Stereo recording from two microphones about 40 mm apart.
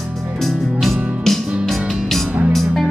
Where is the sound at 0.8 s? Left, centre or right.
Centre.